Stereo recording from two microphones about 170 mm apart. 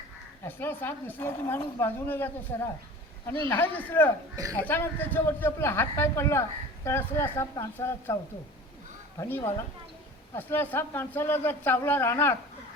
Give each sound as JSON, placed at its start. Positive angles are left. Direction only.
{"t": 0.4, "sound": "speech", "side_deg": 10}
{"t": 9.1, "sound": "speech", "side_deg": 20}